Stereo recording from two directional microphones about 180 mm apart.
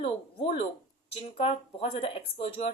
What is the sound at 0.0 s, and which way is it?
Speech, 30° left (ahead or behind).